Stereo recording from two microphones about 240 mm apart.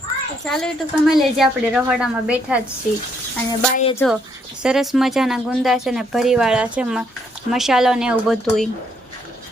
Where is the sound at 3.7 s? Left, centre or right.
Left.